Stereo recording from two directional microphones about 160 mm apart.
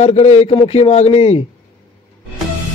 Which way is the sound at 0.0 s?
45° left (ahead or behind).